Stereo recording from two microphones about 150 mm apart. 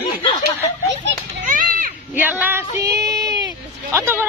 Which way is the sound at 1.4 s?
60° right (ahead or behind).